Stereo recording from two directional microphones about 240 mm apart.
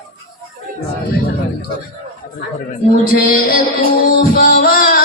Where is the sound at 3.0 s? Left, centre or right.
Left.